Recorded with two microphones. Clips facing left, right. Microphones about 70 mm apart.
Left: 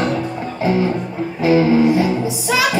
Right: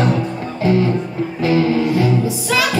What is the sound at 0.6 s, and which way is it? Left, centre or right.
Music, left.